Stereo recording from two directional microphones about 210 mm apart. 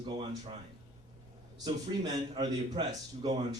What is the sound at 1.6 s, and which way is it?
Speech, 20° right (ahead or behind).